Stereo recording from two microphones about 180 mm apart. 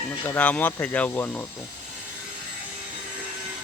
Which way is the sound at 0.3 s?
10° left (ahead or behind).